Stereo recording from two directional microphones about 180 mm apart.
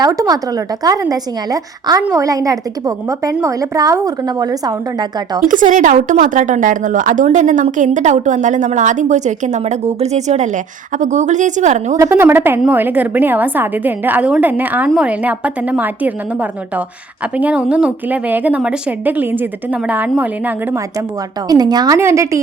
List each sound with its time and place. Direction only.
0.0 s a woman's voice: 20° right (ahead or behind)
5.4 s speech: 45° right (ahead or behind)
11.9 s a woman's voice: 15° right (ahead or behind)
21.5 s a woman's voice: 20° right (ahead or behind)